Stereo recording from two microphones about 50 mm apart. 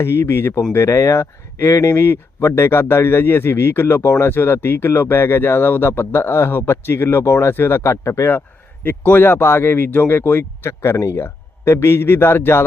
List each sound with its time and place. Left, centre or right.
0.0 s speech: left
0.9 s speech: left
4.0 s speech: left
4.3 s speech: left
7.5 s speech: left
8.3 s speech: left